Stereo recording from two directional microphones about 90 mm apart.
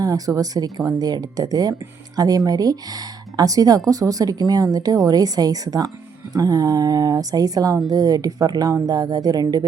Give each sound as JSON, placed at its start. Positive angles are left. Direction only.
{"t": 0.0, "sound": "speech", "side_deg": -40}